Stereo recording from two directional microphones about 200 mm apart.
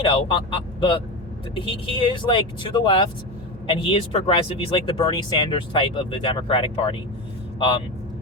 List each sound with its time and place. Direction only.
0.0 s speech: 25° left (ahead or behind)